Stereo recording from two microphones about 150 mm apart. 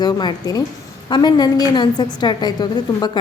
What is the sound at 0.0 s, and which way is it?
A woman's voice, 30° left (ahead or behind).